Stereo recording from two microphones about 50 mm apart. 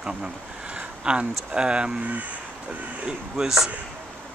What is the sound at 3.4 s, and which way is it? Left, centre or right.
Speech, centre.